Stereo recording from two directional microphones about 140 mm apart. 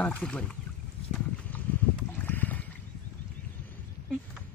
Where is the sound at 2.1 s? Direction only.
15° left (ahead or behind).